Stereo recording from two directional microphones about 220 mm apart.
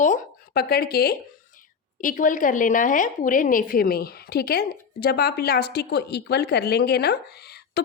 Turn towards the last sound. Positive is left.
turn(degrees=45)  # may be behind; listen again after turning